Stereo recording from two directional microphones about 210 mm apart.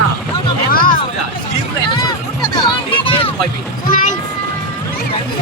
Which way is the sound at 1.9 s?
20° left (ahead or behind).